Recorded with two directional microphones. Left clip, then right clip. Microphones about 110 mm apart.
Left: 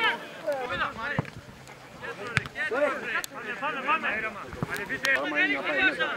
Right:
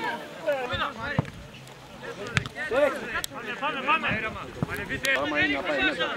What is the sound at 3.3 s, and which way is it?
Speech, 20° right (ahead or behind).